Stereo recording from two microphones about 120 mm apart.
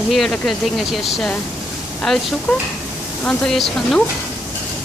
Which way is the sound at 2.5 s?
10° left (ahead or behind).